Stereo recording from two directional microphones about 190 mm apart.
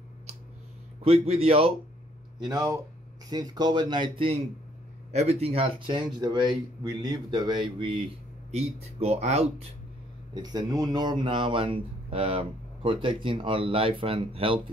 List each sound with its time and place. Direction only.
1.0 s speech: 30° right (ahead or behind)
2.3 s speech: 20° right (ahead or behind)
10.3 s speech: 20° right (ahead or behind)